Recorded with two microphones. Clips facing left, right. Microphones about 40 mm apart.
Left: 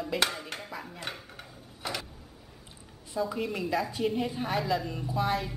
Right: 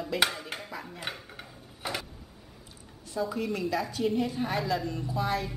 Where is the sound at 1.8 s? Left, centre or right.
Centre.